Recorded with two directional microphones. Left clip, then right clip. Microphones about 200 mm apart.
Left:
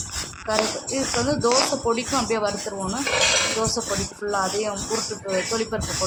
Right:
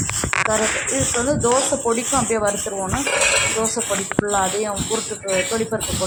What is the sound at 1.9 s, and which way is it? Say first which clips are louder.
Speech: right 3 dB; 20° right (ahead or behind).